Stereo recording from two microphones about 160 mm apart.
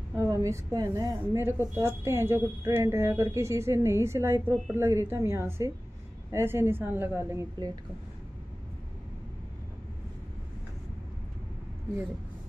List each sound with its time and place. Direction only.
0.1 s a woman's voice: 15° right (ahead or behind)